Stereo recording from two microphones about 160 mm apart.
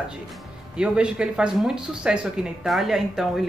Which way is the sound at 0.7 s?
5° right (ahead or behind).